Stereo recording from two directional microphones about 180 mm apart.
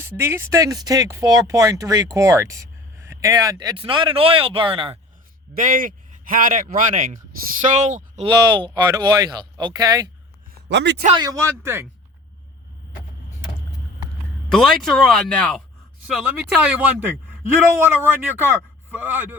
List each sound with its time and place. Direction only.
0.0 s speech: 15° right (ahead or behind); by 4.9 s 30° right (ahead or behind)
5.5 s speech: 50° right (ahead or behind)
8.3 s speech: 25° right (ahead or behind)
10.7 s a man's voice: 75° right (ahead or behind)
11.1 s a man's voice: 20° right (ahead or behind)
14.5 s speech: 5° left (ahead or behind)
16.1 s a man's voice: 5° right (ahead or behind)